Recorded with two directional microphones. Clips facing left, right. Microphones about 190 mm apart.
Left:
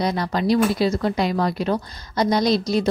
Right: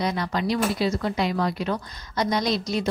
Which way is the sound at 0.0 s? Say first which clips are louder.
Left 4 dB; 35° left (ahead or behind).